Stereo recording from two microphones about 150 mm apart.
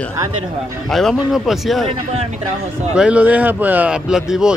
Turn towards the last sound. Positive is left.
turn(degrees=-5)  # may be behind; listen again after turning